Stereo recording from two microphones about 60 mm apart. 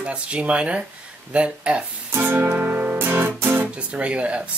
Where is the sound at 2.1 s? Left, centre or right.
Right.